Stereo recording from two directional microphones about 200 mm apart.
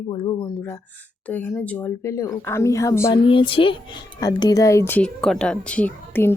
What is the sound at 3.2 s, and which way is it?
A woman's voice, 25° left (ahead or behind).